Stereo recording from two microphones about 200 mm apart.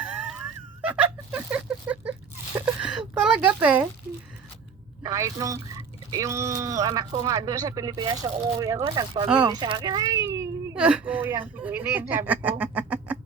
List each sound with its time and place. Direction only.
0.0 s wail: 5° right (ahead or behind)
0.8 s a sound: 5° right (ahead or behind)
5.0 s speech: 15° right (ahead or behind)